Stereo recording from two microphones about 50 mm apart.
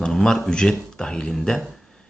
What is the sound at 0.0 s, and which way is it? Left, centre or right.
Speech, centre.